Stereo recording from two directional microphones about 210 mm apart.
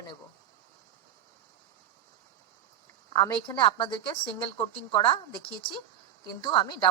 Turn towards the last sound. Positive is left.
turn(degrees=20)  # may be behind; listen again after turning